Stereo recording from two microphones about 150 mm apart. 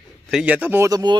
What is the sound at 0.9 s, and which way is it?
Speech, 25° right (ahead or behind).